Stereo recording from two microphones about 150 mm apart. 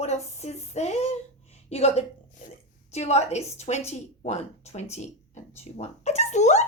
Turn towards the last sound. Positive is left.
turn(degrees=50)  # may be behind; listen again after turning